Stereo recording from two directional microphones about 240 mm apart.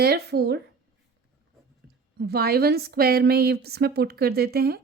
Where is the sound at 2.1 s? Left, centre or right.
Right.